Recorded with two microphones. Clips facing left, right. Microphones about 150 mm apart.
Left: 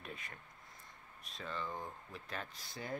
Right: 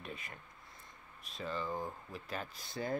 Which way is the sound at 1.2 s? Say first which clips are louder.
Right 4 dB; 5° right (ahead or behind).